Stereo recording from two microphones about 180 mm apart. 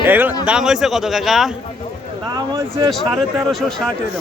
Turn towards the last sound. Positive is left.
turn(degrees=-5)  # may be behind; listen again after turning